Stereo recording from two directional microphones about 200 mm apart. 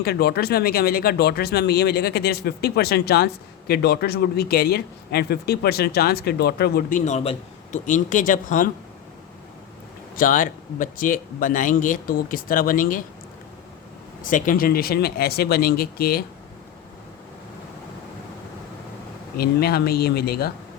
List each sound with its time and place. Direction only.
0.0 s speech: 50° left (ahead or behind)
7.0 s speech: 30° left (ahead or behind)
10.2 s speech: 40° left (ahead or behind)
14.2 s speech: 40° left (ahead or behind)
19.4 s speech: 50° left (ahead or behind)